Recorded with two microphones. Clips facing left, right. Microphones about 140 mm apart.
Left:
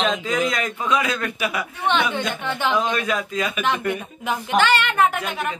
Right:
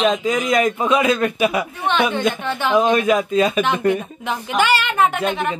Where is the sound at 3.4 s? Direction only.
30° right (ahead or behind).